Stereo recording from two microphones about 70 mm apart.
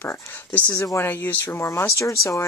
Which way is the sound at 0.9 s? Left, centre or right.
Left.